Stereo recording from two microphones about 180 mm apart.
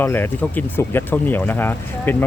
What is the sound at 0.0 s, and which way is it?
Speech, 10° left (ahead or behind).